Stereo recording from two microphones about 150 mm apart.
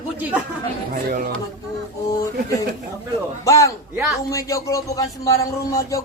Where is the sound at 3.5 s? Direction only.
20° left (ahead or behind).